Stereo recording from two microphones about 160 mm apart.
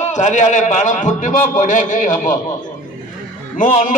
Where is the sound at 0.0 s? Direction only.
50° left (ahead or behind).